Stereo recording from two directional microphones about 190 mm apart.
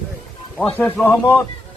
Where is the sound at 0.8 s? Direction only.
10° left (ahead or behind).